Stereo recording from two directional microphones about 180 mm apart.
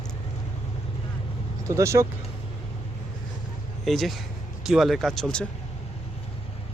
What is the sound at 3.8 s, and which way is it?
Speech, centre (ahead or behind).